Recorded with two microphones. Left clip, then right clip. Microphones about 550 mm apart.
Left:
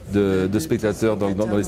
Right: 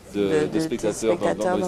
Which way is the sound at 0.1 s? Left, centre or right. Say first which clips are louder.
Left 2 dB; left.